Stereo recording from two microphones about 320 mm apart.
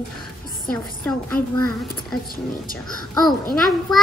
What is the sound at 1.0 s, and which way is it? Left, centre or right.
Speech, centre.